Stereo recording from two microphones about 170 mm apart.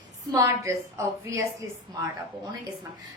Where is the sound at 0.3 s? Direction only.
15° right (ahead or behind).